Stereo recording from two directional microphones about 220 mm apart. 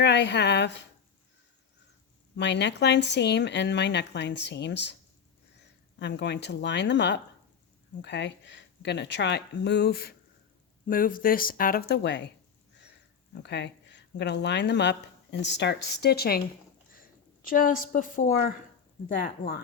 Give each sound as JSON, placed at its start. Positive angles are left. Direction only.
{"t": 0.0, "sound": "speech", "side_deg": 50}
{"t": 2.3, "sound": "speech", "side_deg": 50}
{"t": 6.0, "sound": "speech", "side_deg": 50}
{"t": 13.3, "sound": "speech", "side_deg": 50}
{"t": 17.4, "sound": "speech", "side_deg": 40}